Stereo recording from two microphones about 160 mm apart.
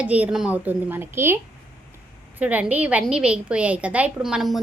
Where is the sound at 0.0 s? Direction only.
10° right (ahead or behind).